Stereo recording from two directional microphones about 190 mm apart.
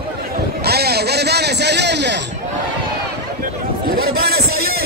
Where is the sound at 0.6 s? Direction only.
55° right (ahead or behind).